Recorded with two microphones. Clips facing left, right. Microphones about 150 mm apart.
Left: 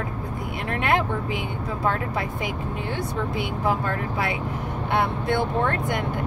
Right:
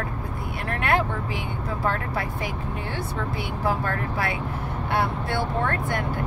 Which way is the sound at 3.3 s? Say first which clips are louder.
Left 1 dB; 20° left (ahead or behind).